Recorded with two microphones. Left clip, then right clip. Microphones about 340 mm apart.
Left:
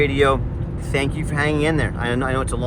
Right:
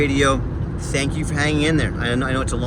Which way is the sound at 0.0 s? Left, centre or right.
Centre.